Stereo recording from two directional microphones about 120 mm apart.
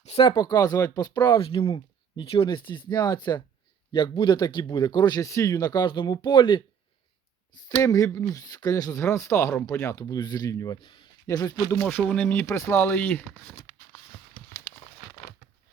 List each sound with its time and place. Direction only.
0.0 s a sound: 55° left (ahead or behind)
0.3 s speech: 35° left (ahead or behind)
1.4 s speech: 50° left (ahead or behind)
7.8 s speech: 25° left (ahead or behind)
10.0 s speech: 35° left (ahead or behind)
10.8 s speech: 40° left (ahead or behind)
11.8 s speech: 15° left (ahead or behind)
14.7 s crumpling: 20° left (ahead or behind)